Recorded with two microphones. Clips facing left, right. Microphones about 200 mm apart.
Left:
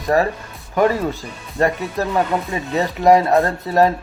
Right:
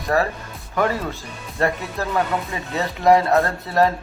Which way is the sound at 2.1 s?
20° left (ahead or behind).